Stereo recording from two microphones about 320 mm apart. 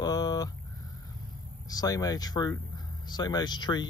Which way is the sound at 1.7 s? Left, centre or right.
Centre.